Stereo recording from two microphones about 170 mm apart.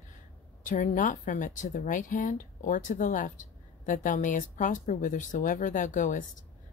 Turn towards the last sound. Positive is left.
turn(degrees=50)  # may be behind; listen again after turning